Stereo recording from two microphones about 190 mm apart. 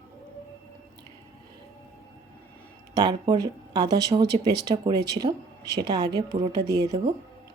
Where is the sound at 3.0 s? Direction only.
20° right (ahead or behind).